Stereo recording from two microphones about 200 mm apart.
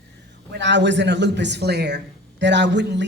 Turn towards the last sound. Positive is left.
turn(degrees=-60)  # may be behind; listen again after turning